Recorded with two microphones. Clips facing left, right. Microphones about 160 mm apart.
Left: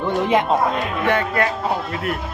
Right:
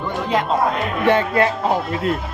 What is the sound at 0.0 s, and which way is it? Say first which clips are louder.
Speech: left 3 dB; 20° left (ahead or behind).